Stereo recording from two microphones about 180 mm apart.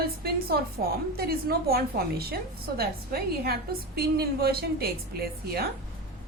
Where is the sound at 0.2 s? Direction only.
60° right (ahead or behind).